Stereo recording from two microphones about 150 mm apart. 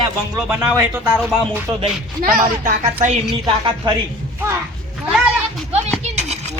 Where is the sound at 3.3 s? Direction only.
30° right (ahead or behind).